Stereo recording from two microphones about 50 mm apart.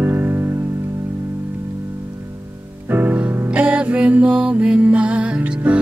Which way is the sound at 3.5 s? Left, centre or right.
Right.